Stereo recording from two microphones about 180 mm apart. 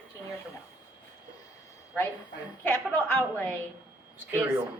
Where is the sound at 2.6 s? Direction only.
10° left (ahead or behind).